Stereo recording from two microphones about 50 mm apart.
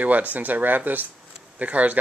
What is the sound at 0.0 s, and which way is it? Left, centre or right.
Speech, right.